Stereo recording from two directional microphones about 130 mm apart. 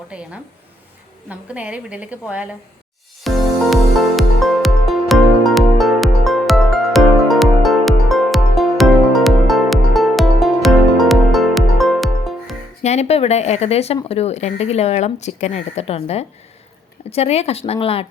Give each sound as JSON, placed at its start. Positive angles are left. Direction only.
{"t": 0.1, "sound": "a woman's voice", "side_deg": -10}
{"t": 3.2, "sound": "music", "side_deg": 0}
{"t": 12.8, "sound": "speech", "side_deg": 55}